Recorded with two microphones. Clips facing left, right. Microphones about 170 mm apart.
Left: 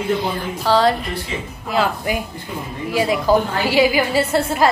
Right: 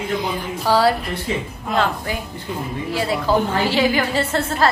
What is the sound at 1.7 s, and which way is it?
A woman's voice, 5° left (ahead or behind).